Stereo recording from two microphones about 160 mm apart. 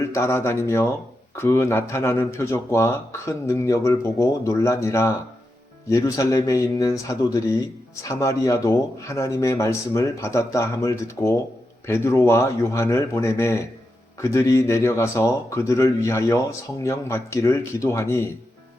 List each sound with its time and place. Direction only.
0.0 s speech: 20° left (ahead or behind)